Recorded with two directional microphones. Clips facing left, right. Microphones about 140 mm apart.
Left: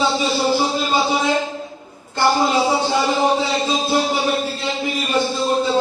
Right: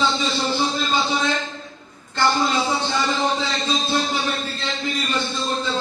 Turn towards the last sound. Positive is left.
turn(degrees=10)  # may be behind; listen again after turning